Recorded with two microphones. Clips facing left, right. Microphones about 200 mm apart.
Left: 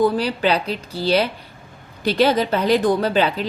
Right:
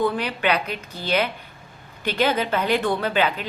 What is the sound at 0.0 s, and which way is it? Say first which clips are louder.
A woman's voice: left 5 dB; 35° left (ahead or behind).